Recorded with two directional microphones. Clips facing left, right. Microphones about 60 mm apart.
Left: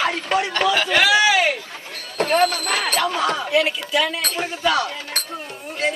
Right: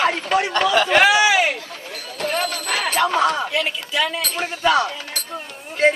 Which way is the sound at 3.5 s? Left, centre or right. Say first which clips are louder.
Left 4 dB; centre.